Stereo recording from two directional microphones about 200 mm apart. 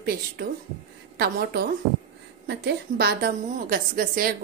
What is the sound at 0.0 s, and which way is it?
A woman's voice, 50° right (ahead or behind).